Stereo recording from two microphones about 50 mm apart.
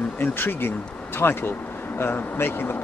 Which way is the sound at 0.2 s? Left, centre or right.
Left.